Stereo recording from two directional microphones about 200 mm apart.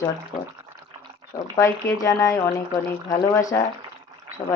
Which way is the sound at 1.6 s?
15° left (ahead or behind).